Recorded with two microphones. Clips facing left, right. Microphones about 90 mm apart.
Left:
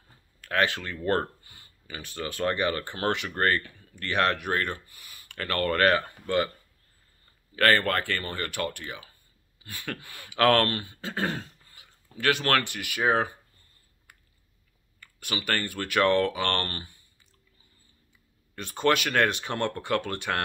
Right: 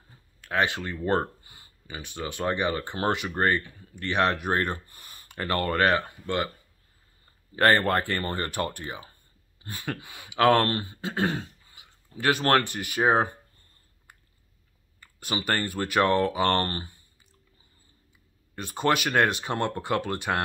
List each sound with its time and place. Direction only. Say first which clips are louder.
0.6 s speech: even; 15° right (ahead or behind)
0.9 s speech: right 1 dB; centre (ahead or behind)
1.4 s speech: right 1 dB; 20° right (ahead or behind)
4.9 s a sound: right 2 dB; 35° right (ahead or behind)
5.3 s speech: even; 20° right (ahead or behind); by 6.5 s 5° right (ahead or behind)
7.5 s speech: right 2 dB; 25° right (ahead or behind)
9.6 s a sound: right 3 dB; 30° right (ahead or behind)
9.8 s speech: right 2 dB; 15° right (ahead or behind)
10.5 s speech: right 1 dB; 25° right (ahead or behind)
11.0 s throat clearing: right 3 dB; 10° right (ahead or behind)
12.4 s speech: right 3 dB; 30° right (ahead or behind)
15.0 s speech: right 3 dB; 25° right (ahead or behind)
18.5 s speech: even; 15° right (ahead or behind)